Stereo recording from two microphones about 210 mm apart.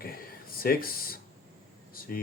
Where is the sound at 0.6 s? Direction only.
45° left (ahead or behind).